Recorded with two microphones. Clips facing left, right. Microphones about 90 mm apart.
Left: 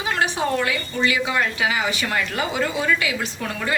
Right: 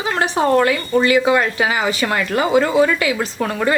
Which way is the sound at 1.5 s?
40° right (ahead or behind).